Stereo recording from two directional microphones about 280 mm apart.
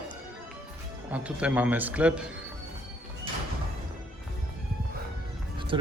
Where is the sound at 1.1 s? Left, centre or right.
Centre.